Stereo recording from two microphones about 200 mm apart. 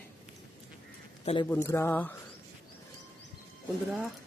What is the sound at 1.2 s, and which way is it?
Speech, 30° left (ahead or behind).